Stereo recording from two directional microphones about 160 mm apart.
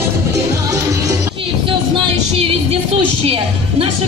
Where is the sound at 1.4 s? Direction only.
35° right (ahead or behind).